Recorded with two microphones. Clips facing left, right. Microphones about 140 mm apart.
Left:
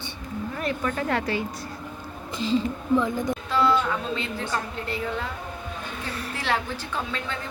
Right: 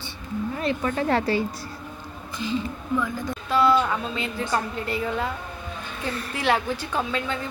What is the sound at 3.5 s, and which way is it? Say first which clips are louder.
Speech: right 3 dB; 10° right (ahead or behind).